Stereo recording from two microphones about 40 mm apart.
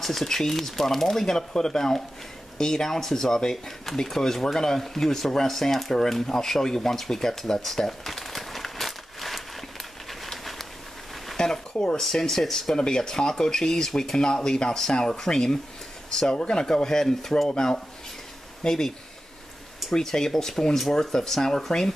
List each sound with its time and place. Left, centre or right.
0.0 s speech: centre
7.6 s crumpling: centre
10.3 s a sound: centre
11.3 s speech: centre
12.0 s speech: centre